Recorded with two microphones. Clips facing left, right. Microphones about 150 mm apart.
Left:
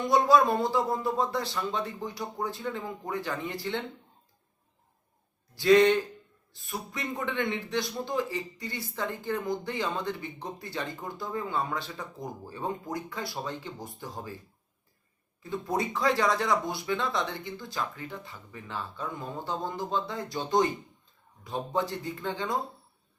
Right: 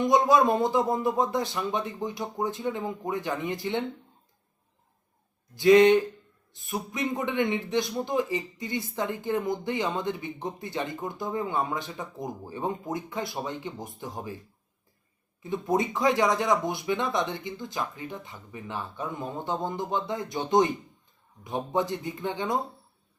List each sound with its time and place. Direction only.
0.0 s a man's voice: 20° right (ahead or behind)
5.5 s a man's voice: 20° right (ahead or behind)
15.4 s a man's voice: 20° right (ahead or behind)